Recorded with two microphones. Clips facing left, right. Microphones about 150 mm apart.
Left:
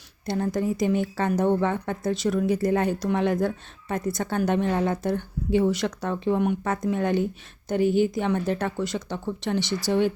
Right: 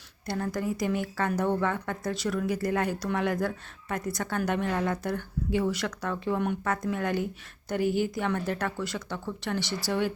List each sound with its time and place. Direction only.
0.3 s a woman's voice: 25° left (ahead or behind)